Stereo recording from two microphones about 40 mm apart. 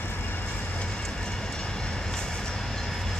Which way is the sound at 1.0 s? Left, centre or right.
Centre.